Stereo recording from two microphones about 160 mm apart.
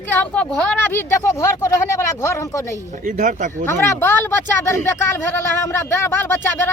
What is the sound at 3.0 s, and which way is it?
Speech, 55° right (ahead or behind).